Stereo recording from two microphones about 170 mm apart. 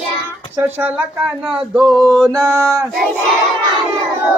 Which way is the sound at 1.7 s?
Centre (ahead or behind).